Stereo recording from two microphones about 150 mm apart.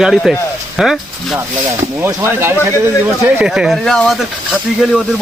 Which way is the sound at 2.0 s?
20° right (ahead or behind).